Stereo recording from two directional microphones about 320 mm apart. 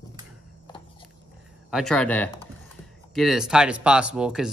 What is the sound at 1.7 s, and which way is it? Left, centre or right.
Speech, centre.